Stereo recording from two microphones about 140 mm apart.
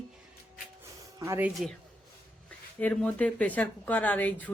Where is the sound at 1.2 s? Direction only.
20° right (ahead or behind).